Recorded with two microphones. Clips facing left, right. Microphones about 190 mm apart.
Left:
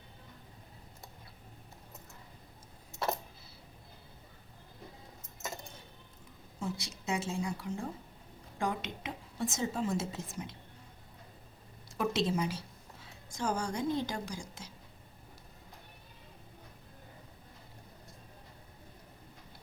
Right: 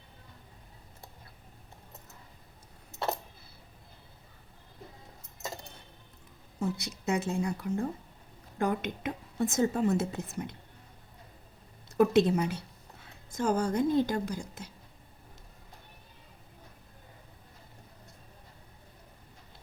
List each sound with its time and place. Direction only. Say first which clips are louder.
6.6 s a woman's voice: right 5 dB; 60° right (ahead or behind)
11.9 s a woman's voice: right 8 dB; 60° right (ahead or behind)
13.1 s a woman's voice: right 6 dB; 55° right (ahead or behind)